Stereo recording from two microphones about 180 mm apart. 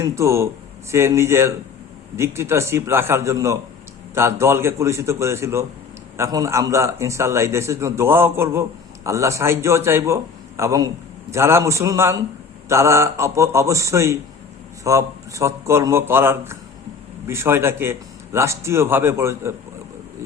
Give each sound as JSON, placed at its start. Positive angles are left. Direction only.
{"t": 0.0, "sound": "a man's voice", "side_deg": -15}